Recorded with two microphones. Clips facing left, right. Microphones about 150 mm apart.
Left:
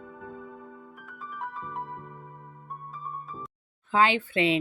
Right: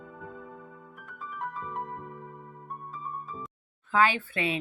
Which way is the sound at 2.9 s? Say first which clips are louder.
Even; centre (ahead or behind).